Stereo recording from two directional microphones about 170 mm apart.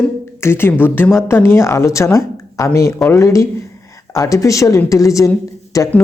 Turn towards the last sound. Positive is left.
turn(degrees=20)  # may be behind; listen again after turning